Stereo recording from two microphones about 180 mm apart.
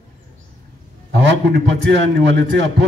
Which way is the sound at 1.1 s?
65° right (ahead or behind).